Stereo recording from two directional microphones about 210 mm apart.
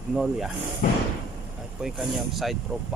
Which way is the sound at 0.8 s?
40° left (ahead or behind).